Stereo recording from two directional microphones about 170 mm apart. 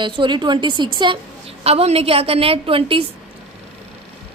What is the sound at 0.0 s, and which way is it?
A woman's voice, 30° right (ahead or behind).